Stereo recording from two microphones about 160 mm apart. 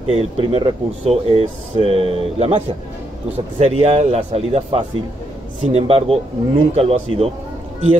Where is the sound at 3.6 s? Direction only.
40° right (ahead or behind).